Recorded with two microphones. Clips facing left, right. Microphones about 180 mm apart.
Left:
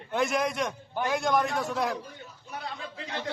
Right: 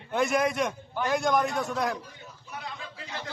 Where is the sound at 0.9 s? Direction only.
15° left (ahead or behind).